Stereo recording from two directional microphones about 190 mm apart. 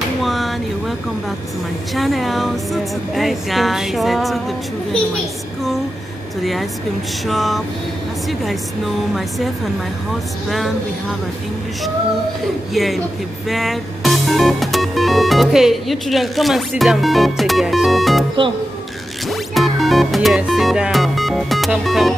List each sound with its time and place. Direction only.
0.2 s a sound: centre (ahead or behind)
2.0 s music: centre (ahead or behind)
6.4 s music: centre (ahead or behind)
10.5 s music: centre (ahead or behind)
12.7 s music: centre (ahead or behind)
19.2 s music: centre (ahead or behind)